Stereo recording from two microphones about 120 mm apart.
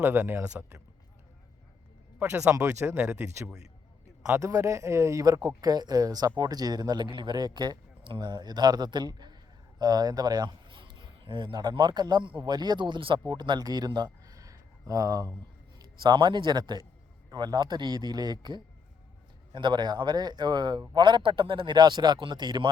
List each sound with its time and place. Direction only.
0.0 s a man's voice: 15° right (ahead or behind)
2.1 s speech: 10° right (ahead or behind)
2.6 s speech: 20° right (ahead or behind)
16.0 s a man's voice: 40° right (ahead or behind)